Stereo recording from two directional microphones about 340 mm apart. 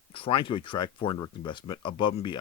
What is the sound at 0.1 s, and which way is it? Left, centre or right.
Speech, centre.